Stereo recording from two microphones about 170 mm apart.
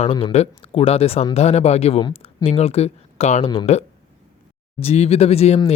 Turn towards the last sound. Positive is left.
turn(degrees=35)  # may be behind; listen again after turning